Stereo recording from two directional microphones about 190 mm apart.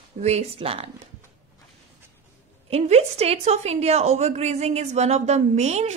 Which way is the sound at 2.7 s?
35° right (ahead or behind).